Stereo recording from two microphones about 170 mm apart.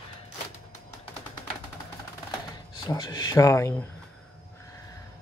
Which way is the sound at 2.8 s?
25° left (ahead or behind).